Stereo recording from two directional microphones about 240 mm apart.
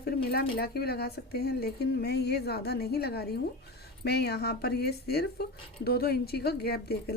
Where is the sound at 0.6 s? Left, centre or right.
Left.